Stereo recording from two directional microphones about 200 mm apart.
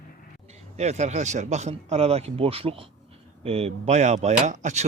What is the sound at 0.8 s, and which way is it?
Speech, 35° right (ahead or behind).